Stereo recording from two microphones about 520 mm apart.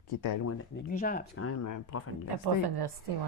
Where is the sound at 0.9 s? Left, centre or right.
Centre.